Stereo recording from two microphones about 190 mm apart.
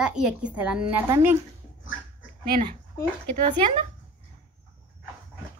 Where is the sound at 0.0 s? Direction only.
5° right (ahead or behind).